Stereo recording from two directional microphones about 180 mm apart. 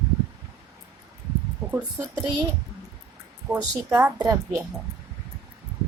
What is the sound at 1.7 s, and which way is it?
Speech, 15° right (ahead or behind).